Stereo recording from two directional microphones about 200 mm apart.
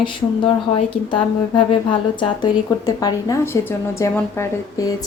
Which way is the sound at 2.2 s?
20° left (ahead or behind).